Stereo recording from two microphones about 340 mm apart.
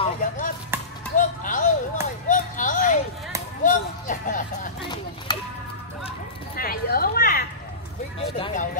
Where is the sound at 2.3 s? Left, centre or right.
Left.